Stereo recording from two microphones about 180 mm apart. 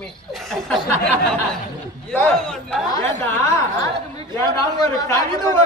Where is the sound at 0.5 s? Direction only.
5° left (ahead or behind).